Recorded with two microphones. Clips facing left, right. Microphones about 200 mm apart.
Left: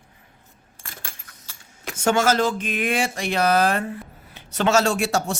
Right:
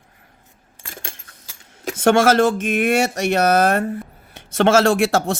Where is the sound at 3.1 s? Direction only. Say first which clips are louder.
Right 4 dB; 45° right (ahead or behind).